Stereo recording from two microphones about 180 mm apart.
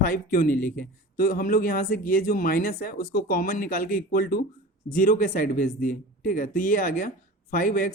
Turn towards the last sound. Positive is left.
turn(degrees=50)  # may be behind; listen again after turning